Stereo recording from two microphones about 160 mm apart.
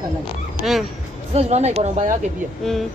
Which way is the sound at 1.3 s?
40° right (ahead or behind).